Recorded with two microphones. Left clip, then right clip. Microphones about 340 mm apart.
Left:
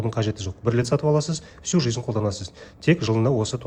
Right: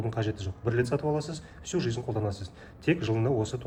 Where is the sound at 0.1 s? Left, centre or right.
Centre.